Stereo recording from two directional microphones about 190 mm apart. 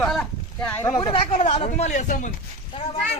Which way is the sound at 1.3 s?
40° left (ahead or behind).